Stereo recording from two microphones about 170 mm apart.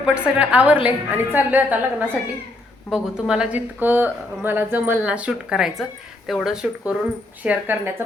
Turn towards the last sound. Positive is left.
turn(degrees=-10)  # may be behind; listen again after turning